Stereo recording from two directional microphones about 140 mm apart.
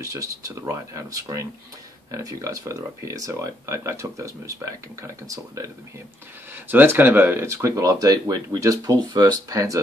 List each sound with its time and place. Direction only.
0.0 s speech: 25° right (ahead or behind)